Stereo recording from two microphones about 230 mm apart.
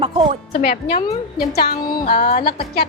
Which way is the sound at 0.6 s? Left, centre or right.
Left.